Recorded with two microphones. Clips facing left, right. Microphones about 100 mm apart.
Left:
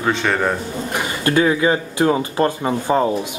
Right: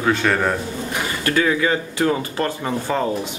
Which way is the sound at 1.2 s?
25° left (ahead or behind).